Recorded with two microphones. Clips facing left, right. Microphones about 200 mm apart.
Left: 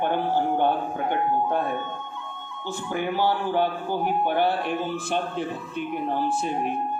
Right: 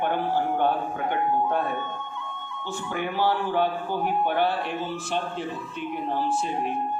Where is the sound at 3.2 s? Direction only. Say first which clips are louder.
Right 1 dB; 10° left (ahead or behind).